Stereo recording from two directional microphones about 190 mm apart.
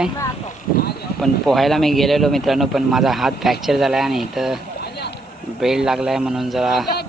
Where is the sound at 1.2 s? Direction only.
Centre (ahead or behind).